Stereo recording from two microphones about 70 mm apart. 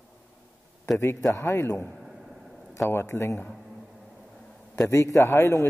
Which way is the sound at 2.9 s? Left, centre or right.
Left.